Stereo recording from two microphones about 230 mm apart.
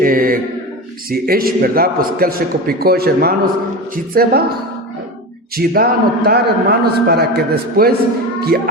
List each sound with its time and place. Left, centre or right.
0.0 s a sound: right
1.1 s a man's voice: right
5.5 s a man's voice: right